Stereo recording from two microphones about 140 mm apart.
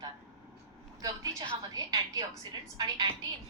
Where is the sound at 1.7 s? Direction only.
25° right (ahead or behind).